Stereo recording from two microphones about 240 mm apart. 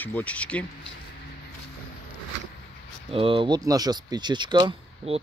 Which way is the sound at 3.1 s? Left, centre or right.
Right.